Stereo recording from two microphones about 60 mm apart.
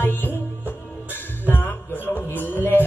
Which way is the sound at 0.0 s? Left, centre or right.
Left.